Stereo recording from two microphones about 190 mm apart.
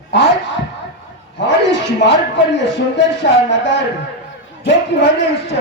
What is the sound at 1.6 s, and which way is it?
Speech, 70° left (ahead or behind).